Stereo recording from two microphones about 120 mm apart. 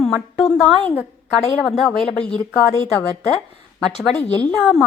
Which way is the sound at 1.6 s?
5° left (ahead or behind).